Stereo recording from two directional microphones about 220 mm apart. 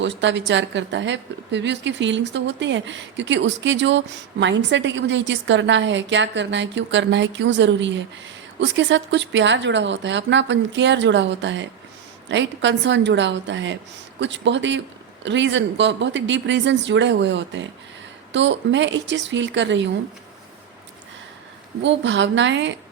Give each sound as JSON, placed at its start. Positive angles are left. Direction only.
{"t": 0.0, "sound": "a woman's voice", "side_deg": -55}
{"t": 21.8, "sound": "a woman's voice", "side_deg": -55}